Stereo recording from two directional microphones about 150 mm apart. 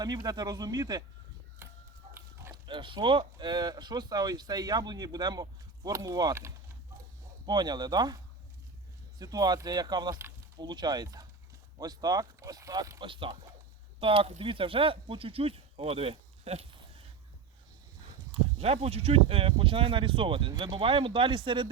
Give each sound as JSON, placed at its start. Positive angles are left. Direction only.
{"t": 0.0, "sound": "speech", "side_deg": -25}
{"t": 2.1, "sound": "livestock", "side_deg": -15}
{"t": 2.6, "sound": "speech", "side_deg": -35}
{"t": 13.1, "sound": "speech", "side_deg": -35}
{"t": 18.6, "sound": "speech", "side_deg": -40}